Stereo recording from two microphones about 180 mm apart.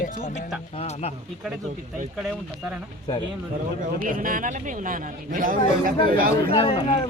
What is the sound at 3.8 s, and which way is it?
A man's voice, 50° right (ahead or behind).